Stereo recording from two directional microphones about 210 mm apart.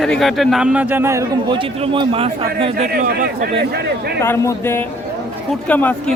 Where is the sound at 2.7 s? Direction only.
45° right (ahead or behind).